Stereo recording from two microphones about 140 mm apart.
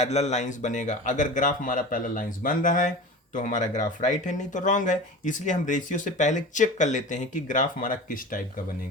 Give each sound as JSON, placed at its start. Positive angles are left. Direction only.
{"t": 0.0, "sound": "speech", "side_deg": 50}